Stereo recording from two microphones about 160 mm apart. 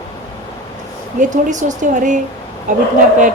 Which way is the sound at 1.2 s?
50° right (ahead or behind).